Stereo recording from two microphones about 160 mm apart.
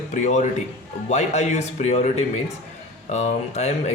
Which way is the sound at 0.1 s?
50° left (ahead or behind).